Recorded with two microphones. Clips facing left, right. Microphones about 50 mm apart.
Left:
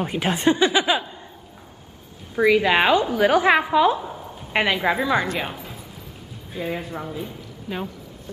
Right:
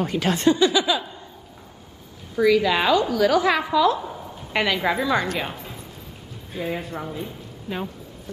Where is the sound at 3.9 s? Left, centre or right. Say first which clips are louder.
Even; centre.